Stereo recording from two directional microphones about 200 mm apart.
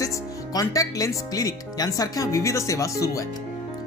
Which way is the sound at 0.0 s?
15° left (ahead or behind).